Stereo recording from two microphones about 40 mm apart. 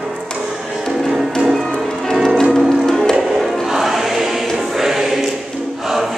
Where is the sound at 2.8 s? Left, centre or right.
Centre.